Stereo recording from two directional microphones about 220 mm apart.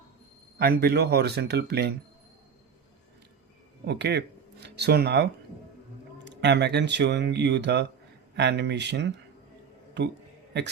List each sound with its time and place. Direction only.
0.6 s speech: 45° right (ahead or behind)
3.8 s speech: 50° right (ahead or behind)